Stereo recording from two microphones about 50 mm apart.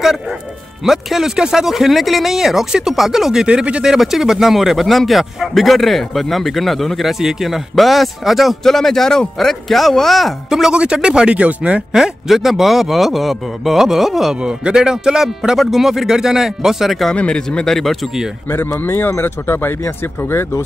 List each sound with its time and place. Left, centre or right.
0.0 s speech: centre
3.4 s speech: right
3.8 s speech: centre
10.7 s speech: centre
11.9 s speech: centre
14.3 s speech: centre
17.1 s speech: centre
17.7 s speech: centre
18.9 s speech: left